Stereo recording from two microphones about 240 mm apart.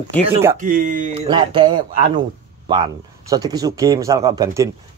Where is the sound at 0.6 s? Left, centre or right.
Right.